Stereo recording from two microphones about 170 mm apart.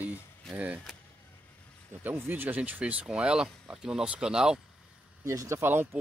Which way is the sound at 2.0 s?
15° right (ahead or behind).